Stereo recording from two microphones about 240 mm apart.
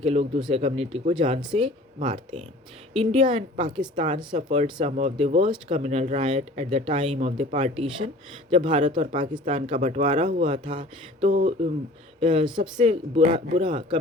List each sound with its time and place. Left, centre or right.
0.0 s speech: right